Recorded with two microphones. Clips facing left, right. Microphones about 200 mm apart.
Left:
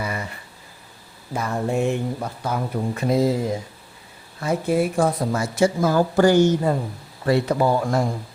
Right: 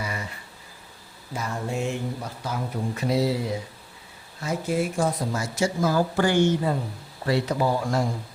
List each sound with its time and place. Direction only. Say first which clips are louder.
0.0 s a sound: left 4 dB; 55° left (ahead or behind)
1.3 s speech: left 6 dB; 55° left (ahead or behind)
4.4 s speech: left 5 dB; 60° left (ahead or behind)
6.1 s a woman's voice: left 8 dB; 40° left (ahead or behind)